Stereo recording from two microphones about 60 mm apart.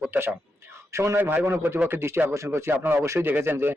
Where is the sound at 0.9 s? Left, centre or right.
Right.